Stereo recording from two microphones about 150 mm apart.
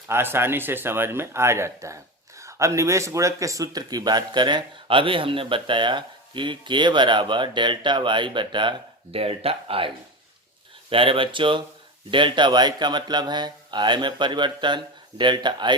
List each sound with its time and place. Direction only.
0.1 s speech: 15° right (ahead or behind)